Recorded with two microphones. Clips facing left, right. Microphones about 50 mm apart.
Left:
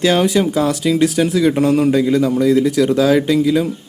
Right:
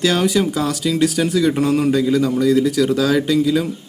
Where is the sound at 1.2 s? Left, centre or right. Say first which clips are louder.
Left 2 dB; centre.